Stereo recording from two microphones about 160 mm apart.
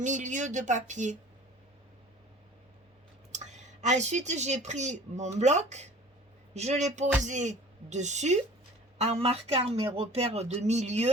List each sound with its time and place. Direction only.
0.0 s speech: 50° right (ahead or behind)
3.3 s speech: 45° right (ahead or behind)